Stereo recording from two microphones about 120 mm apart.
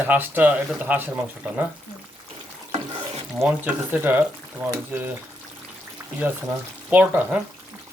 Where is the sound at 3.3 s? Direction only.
15° right (ahead or behind).